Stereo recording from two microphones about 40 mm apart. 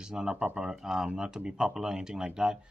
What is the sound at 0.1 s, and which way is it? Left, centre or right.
Speech, centre.